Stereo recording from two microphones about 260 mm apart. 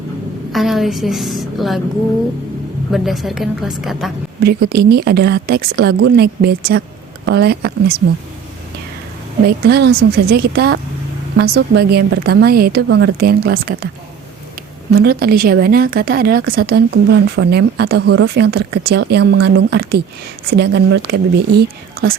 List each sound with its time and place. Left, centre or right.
0.5 s a woman's voice: centre
2.9 s a woman's voice: centre
4.4 s speech: right
9.5 s speech: right
14.9 s speech: right